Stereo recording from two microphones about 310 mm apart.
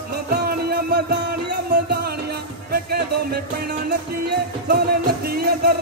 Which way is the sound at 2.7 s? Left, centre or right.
Right.